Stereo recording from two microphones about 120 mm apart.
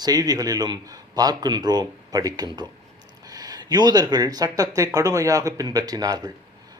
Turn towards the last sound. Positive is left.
turn(degrees=-35)  # may be behind; listen again after turning